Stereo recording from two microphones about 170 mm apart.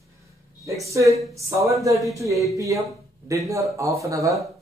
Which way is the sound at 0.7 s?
20° right (ahead or behind).